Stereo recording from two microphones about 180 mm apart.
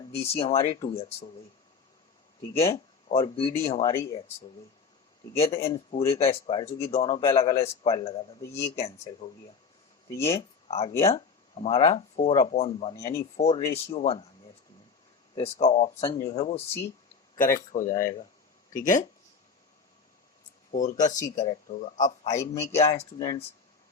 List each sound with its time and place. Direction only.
0.0 s speech: 30° left (ahead or behind)
2.6 s speech: 35° left (ahead or behind)
3.9 s speech: 20° left (ahead or behind)
5.4 s speech: 30° left (ahead or behind)
8.4 s speech: 15° left (ahead or behind)
8.7 s speech: 35° left (ahead or behind)
10.7 s speech: 35° left (ahead or behind)
15.4 s speech: 35° left (ahead or behind)
17.3 s speech: 50° left (ahead or behind)
20.7 s speech: 45° left (ahead or behind); by 23.4 s 30° left (ahead or behind)